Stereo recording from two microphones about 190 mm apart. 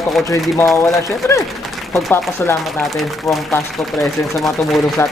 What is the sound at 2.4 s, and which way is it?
Speech, 10° left (ahead or behind).